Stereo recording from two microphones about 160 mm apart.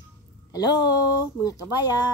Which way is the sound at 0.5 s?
25° left (ahead or behind).